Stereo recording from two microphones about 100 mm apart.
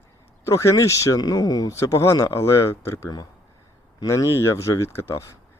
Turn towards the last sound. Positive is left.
turn(degrees=30)  # may be behind; listen again after turning